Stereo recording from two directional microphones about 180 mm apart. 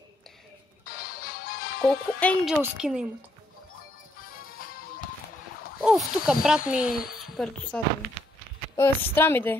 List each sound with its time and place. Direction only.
0.9 s music: 55° left (ahead or behind)
1.9 s speech: 5° left (ahead or behind)
4.6 s music: 55° left (ahead or behind)
5.9 s a woman's voice: 5° right (ahead or behind)
8.7 s a woman's voice: 15° left (ahead or behind)